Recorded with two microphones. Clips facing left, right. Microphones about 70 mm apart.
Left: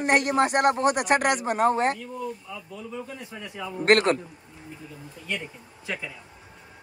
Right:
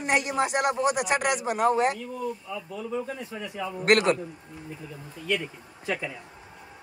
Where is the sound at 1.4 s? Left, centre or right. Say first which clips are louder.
Left 1 dB; left.